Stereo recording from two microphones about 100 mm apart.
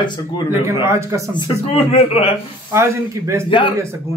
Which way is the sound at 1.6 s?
85° left.